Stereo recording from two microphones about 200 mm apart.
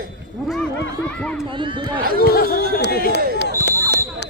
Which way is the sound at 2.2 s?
50° left (ahead or behind).